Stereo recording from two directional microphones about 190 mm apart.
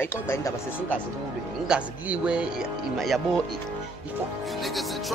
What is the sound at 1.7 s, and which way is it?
Speech, 5° right (ahead or behind).